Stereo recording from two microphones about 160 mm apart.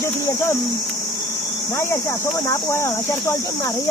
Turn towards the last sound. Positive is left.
turn(degrees=15)  # may be behind; listen again after turning